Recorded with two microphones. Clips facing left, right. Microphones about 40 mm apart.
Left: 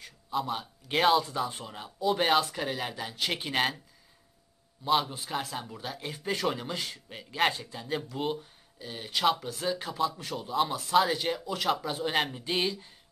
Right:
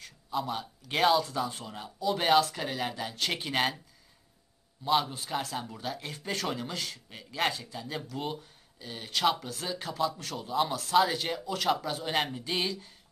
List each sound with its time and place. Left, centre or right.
0.0 s speech: centre
4.8 s a man's voice: centre